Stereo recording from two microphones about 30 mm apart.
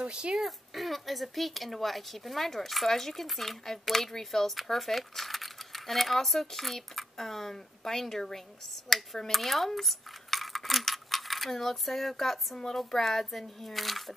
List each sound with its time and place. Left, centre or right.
0.0 s speech: right
0.4 s speech: centre
8.8 s cutlery: centre
12.7 s speech: centre